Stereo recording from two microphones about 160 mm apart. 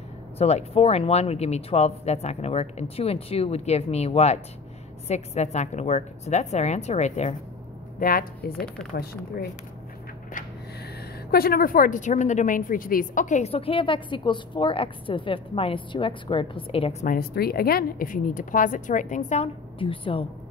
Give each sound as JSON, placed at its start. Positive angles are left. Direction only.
{"t": 0.4, "sound": "a woman's voice", "side_deg": 40}
{"t": 8.0, "sound": "a woman's voice", "side_deg": 65}
{"t": 11.3, "sound": "a woman's voice", "side_deg": 70}
{"t": 17.0, "sound": "a woman's voice", "side_deg": 65}